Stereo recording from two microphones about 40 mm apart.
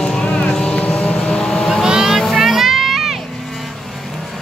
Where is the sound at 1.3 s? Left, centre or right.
Left.